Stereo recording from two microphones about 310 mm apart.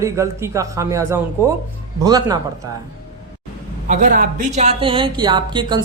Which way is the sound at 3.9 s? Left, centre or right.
Right.